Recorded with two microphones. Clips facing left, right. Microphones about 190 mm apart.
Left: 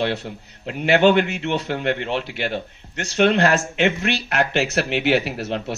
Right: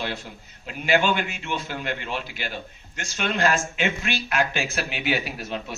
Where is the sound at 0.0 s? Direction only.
65° left (ahead or behind).